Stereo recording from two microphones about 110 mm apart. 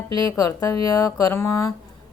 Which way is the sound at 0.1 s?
35° left (ahead or behind).